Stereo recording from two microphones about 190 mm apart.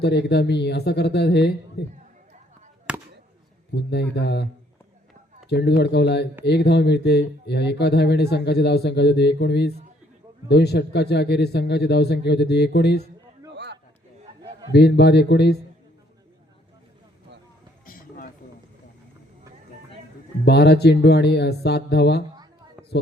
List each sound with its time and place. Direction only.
0.0 s speech: 60° left (ahead or behind)
2.9 s a sound: 5° right (ahead or behind)
3.8 s speech: 60° left (ahead or behind)
5.5 s speech: 60° left (ahead or behind)
14.7 s speech: 60° left (ahead or behind)
17.8 s a sound: 45° left (ahead or behind)
20.4 s speech: 60° left (ahead or behind)